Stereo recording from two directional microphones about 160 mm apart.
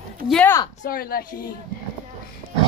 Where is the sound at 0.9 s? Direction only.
65° left (ahead or behind).